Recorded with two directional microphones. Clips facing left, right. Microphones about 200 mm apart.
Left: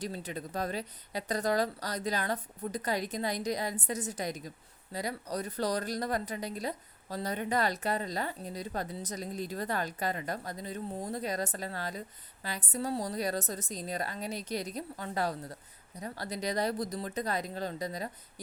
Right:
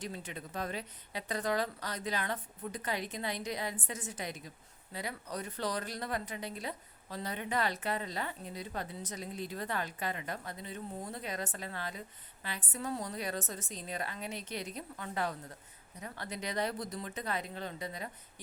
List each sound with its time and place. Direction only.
0.0 s a woman's voice: 35° left (ahead or behind)